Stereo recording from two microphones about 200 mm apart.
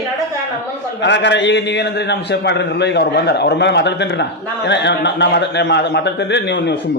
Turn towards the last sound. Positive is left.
turn(degrees=60)  # may be behind; listen again after turning